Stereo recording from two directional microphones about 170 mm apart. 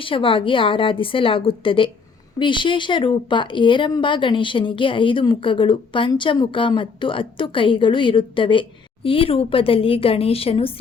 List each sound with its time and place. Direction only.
0.0 s a woman's voice: 30° left (ahead or behind)